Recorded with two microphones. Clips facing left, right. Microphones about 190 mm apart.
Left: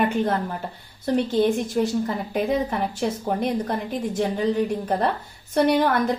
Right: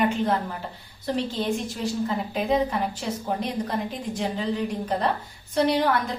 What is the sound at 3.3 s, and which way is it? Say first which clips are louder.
Speech: left 1 dB; 50° left (ahead or behind).